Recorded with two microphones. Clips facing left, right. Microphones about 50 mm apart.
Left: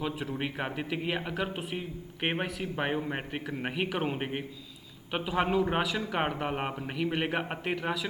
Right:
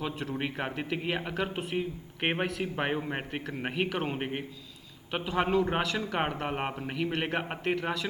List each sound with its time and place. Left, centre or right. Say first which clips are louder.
0.0 s a man's voice: even; centre